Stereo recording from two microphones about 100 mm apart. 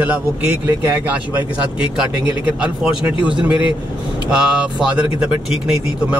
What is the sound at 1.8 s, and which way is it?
Speech, 10° right (ahead or behind).